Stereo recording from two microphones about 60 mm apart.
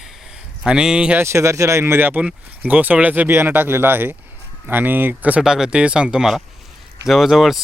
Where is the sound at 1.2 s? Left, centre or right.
Right.